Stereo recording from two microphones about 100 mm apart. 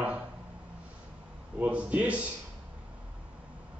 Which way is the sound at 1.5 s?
15° right (ahead or behind).